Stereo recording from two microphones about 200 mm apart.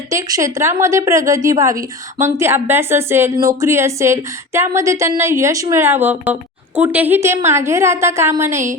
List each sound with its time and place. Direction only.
0.1 s speech: 15° right (ahead or behind)